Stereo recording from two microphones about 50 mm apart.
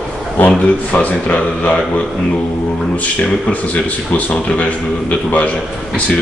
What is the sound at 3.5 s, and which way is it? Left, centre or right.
Speech, left.